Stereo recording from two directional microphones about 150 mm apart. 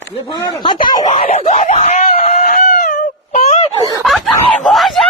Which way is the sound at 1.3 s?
50° left (ahead or behind).